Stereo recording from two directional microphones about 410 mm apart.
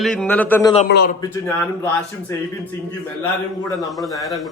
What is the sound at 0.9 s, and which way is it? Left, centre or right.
Speech, left.